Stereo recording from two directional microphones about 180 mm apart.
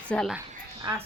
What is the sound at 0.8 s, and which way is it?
Speech, 20° right (ahead or behind).